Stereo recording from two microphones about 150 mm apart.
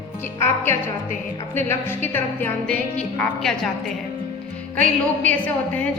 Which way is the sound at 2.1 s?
10° left (ahead or behind).